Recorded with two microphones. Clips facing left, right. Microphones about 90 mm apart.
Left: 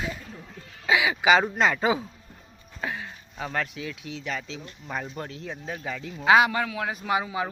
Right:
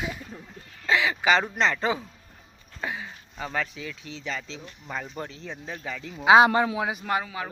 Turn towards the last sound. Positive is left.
turn(degrees=10)  # may be behind; listen again after turning